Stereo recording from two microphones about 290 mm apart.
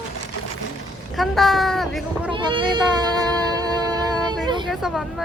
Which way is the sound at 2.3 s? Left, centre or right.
Centre.